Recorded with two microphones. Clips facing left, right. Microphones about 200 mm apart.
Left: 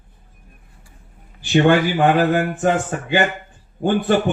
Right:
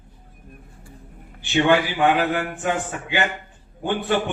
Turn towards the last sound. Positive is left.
turn(degrees=45)  # may be behind; listen again after turning